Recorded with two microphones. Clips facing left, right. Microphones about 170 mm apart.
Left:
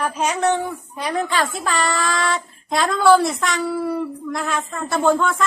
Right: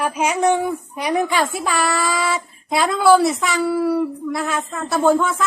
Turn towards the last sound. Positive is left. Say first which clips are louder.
# right 2 dB
turn(degrees=-5)  # may be behind; listen again after turning